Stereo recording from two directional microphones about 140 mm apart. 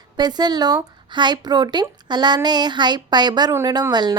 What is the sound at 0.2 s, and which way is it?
A woman's voice, 30° right (ahead or behind).